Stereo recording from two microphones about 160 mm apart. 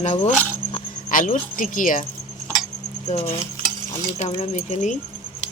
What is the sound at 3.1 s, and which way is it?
Speech, 45° left (ahead or behind).